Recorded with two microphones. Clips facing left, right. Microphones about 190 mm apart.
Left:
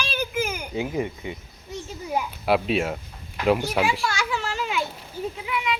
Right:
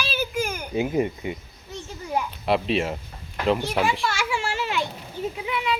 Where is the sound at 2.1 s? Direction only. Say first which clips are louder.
Left 1 dB; 5° left (ahead or behind).